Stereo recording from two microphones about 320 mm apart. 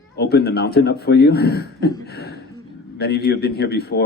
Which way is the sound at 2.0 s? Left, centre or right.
Left.